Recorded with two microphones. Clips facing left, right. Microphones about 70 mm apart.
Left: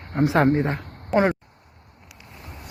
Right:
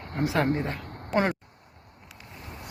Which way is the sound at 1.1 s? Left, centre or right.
Centre.